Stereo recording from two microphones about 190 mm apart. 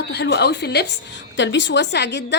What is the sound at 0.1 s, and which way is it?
A woman's voice, 60° left (ahead or behind).